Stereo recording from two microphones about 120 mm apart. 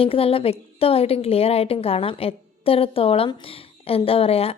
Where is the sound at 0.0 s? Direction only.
50° left (ahead or behind).